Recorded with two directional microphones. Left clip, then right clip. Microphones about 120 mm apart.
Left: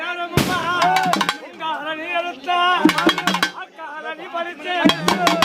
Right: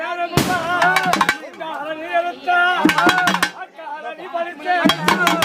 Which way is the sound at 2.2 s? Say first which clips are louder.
Right 4 dB; 15° left (ahead or behind).